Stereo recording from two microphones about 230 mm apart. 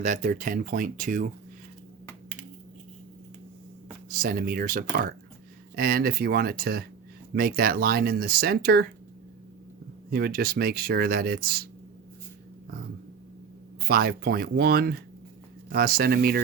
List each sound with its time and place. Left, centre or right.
0.0 s speech: right
4.2 s speech: right
10.1 s speech: right
13.8 s speech: right